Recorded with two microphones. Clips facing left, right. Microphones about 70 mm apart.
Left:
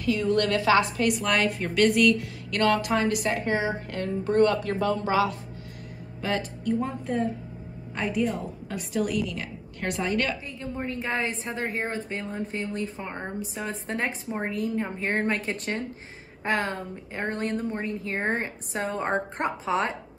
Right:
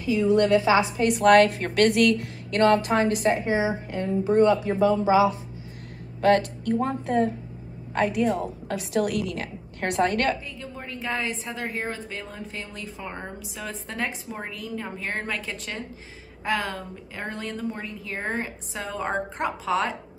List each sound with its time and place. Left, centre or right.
0.0 s a woman's voice: centre
1.1 s a woman's voice: right
2.5 s a woman's voice: right
3.3 s speech: centre
6.2 s a woman's voice: right
9.3 s a woman's voice: right
10.8 s a woman's voice: left